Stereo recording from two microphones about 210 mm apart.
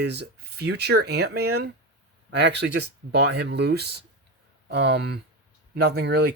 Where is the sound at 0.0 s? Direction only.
55° right (ahead or behind).